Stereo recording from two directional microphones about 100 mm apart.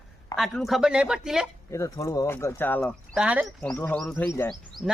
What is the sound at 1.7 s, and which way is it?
Speech, 30° left (ahead or behind).